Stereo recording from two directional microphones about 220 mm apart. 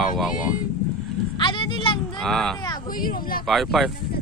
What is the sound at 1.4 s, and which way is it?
Vehicle, 20° left (ahead or behind).